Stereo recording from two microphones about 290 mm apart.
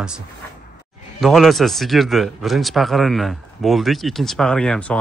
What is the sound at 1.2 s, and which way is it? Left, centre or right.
Speech, centre.